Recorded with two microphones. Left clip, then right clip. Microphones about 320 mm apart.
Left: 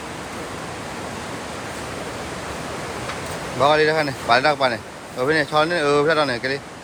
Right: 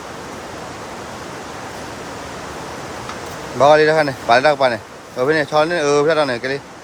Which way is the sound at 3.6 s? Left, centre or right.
Centre.